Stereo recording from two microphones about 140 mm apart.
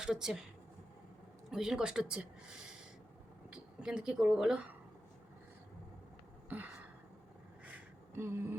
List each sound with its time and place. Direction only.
0.0 s speech: 5° right (ahead or behind)
1.5 s speech: 5° right (ahead or behind)
6.5 s gasp: 15° right (ahead or behind)
7.6 s a sound: 15° right (ahead or behind)